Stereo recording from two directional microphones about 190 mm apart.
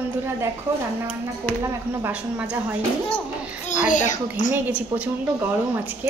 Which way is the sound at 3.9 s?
40° left (ahead or behind).